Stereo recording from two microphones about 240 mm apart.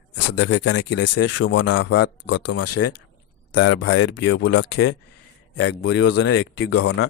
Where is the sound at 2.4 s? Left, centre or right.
Left.